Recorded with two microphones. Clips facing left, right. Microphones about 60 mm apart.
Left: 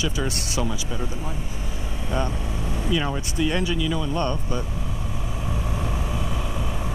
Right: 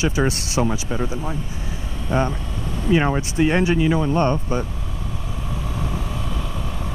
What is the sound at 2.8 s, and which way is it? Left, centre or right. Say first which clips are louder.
Speech: right 7 dB; right.